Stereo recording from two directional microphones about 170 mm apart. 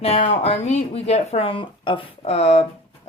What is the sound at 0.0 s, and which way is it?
A woman's voice, 35° left (ahead or behind).